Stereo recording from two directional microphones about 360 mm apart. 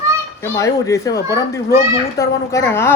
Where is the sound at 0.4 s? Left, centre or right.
Centre.